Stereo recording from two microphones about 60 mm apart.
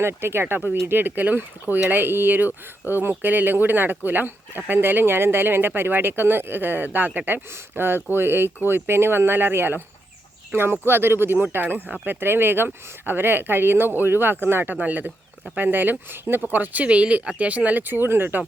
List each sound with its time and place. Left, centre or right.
0.0 s speech: right
7.5 s speech: right